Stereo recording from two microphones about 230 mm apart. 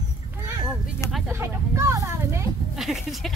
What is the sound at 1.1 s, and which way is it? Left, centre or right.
Speech, centre.